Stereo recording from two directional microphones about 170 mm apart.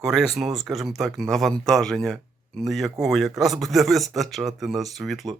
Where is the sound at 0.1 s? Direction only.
Centre (ahead or behind).